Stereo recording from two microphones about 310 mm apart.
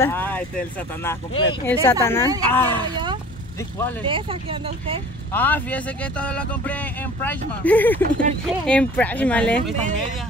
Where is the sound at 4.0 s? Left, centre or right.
Centre.